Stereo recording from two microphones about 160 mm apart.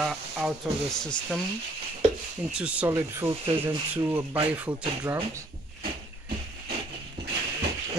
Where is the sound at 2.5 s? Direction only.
5° right (ahead or behind).